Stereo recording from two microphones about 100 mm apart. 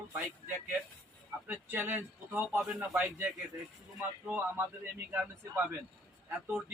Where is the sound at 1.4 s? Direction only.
20° right (ahead or behind).